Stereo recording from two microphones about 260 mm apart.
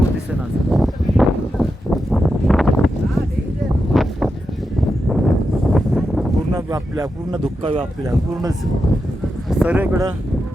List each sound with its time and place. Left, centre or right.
0.7 s a sound: centre
7.6 s speech: right
9.5 s speech: centre